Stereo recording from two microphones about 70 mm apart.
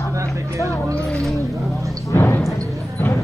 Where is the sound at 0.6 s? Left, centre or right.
Right.